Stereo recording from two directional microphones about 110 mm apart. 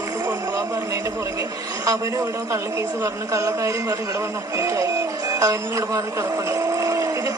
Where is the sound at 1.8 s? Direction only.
25° right (ahead or behind).